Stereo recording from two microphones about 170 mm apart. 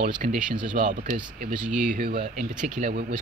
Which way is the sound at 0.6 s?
50° right (ahead or behind).